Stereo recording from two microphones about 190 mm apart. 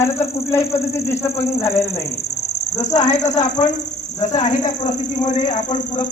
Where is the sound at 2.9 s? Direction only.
35° left (ahead or behind).